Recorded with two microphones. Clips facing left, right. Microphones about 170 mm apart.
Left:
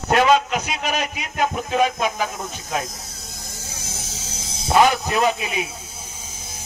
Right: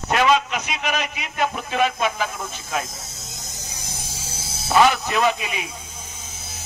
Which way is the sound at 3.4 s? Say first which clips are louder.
Left 3 dB; 20° right (ahead or behind).